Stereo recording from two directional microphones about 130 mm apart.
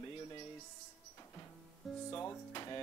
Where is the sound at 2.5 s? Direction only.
35° left (ahead or behind).